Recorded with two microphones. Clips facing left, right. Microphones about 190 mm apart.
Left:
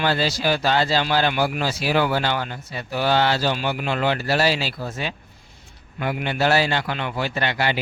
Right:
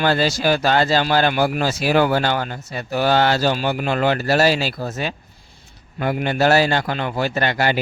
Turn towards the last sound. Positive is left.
turn(degrees=-45)  # may be behind; listen again after turning